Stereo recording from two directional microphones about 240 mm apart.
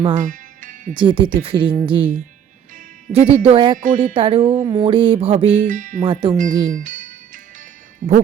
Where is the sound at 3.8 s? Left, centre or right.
Right.